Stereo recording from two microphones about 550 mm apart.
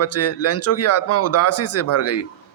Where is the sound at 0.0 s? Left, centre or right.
Left.